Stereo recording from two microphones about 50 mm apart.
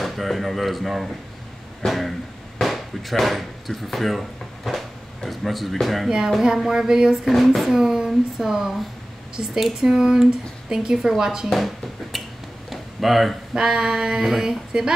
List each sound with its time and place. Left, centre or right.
0.0 s speech: centre
6.0 s speech: centre
7.2 s speech: centre
12.6 s a sound: centre
13.5 s speech: centre